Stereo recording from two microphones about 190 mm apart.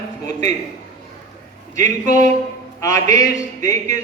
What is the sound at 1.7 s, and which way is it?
A man's voice, 15° left (ahead or behind).